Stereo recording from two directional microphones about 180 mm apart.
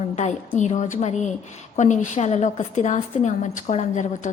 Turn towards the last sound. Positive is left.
turn(degrees=40)  # may be behind; listen again after turning